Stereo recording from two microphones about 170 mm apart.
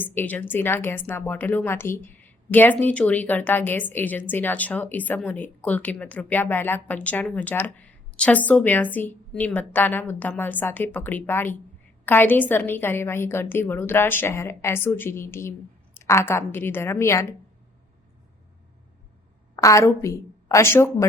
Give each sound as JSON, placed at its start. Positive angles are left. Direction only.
{"t": 0.0, "sound": "speech", "side_deg": 10}
{"t": 19.5, "sound": "a woman's voice", "side_deg": 20}